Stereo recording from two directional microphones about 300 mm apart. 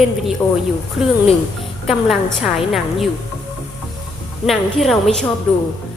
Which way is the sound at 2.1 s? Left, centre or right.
Centre.